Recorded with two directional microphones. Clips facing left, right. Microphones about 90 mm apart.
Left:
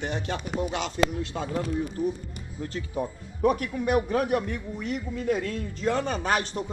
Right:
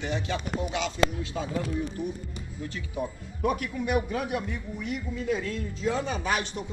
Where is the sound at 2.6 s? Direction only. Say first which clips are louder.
Left 3 dB; 40° left (ahead or behind).